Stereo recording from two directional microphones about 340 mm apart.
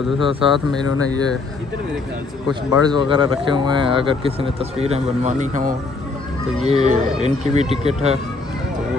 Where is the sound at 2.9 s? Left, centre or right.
Centre.